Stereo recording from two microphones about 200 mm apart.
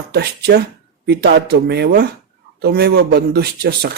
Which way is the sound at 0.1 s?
55° right (ahead or behind).